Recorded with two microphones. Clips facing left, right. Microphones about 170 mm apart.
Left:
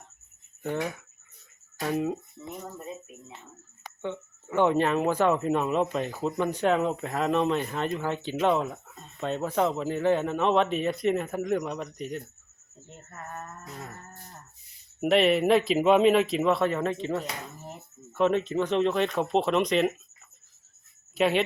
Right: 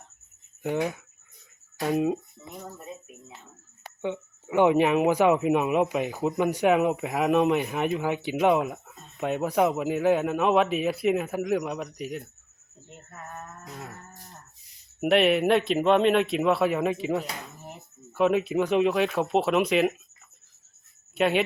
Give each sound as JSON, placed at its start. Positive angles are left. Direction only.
{"t": 0.6, "sound": "speech", "side_deg": -15}
{"t": 4.0, "sound": "a man's voice", "side_deg": -15}
{"t": 21.2, "sound": "a man's voice", "side_deg": 0}